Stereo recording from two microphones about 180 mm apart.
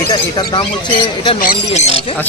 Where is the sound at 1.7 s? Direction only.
35° left (ahead or behind).